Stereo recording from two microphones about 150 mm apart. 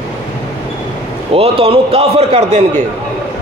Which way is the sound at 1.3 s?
40° right (ahead or behind).